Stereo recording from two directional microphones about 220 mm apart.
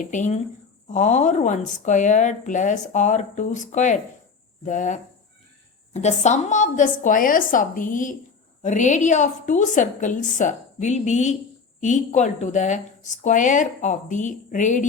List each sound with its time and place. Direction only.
0.0 s speech: 35° left (ahead or behind)